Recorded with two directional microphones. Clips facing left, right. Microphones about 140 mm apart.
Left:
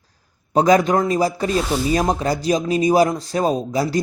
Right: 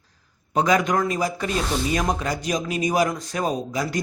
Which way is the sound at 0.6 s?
35° left (ahead or behind).